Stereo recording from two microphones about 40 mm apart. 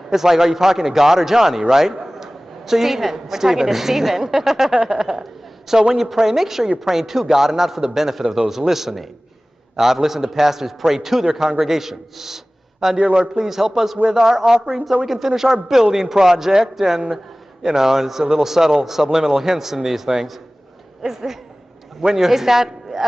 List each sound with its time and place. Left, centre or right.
0.1 s a man's voice: centre
4.7 s speech: right
5.0 s a man's voice: centre
13.1 s a man's voice: right
13.4 s a man's voice: centre
21.1 s a man's voice: centre